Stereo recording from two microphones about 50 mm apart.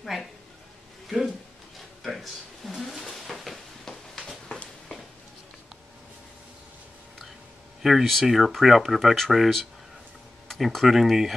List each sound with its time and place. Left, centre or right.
0.0 s speech: centre
1.0 s a sound: centre
7.8 s speech: centre